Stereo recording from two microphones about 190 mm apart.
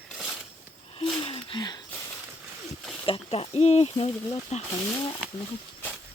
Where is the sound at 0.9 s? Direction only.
30° left (ahead or behind).